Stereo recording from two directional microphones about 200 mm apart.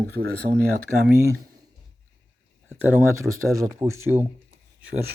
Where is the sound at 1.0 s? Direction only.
15° right (ahead or behind).